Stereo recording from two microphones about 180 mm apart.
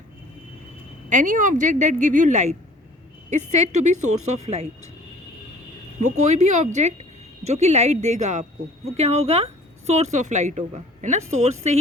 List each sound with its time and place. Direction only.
1.1 s a woman's voice: 45° right (ahead or behind)
6.0 s speech: 40° right (ahead or behind)